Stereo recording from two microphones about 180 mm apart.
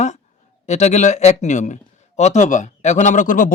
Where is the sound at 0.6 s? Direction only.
40° left (ahead or behind).